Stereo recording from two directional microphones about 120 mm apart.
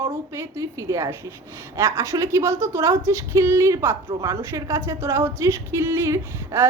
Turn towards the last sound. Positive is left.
turn(degrees=-20)  # may be behind; listen again after turning